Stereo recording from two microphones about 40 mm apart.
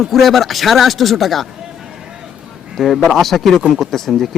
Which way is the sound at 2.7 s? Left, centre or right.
Centre.